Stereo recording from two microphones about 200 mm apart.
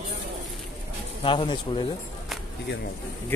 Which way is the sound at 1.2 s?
25° left (ahead or behind).